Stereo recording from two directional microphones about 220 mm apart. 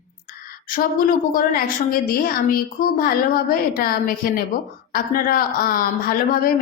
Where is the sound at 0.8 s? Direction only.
40° left (ahead or behind).